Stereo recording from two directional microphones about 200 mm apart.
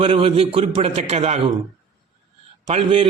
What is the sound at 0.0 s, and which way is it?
A man's voice, 30° right (ahead or behind).